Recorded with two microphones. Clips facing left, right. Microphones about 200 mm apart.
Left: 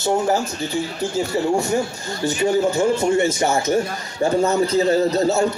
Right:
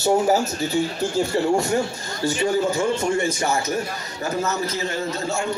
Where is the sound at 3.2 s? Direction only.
25° left (ahead or behind).